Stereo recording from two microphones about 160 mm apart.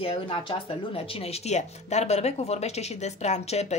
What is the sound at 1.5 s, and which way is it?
Speech, 45° left (ahead or behind).